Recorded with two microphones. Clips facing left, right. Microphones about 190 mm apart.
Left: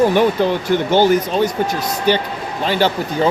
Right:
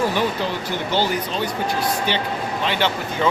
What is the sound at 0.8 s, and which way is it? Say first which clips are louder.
Speech: left 8 dB; 50° left (ahead or behind).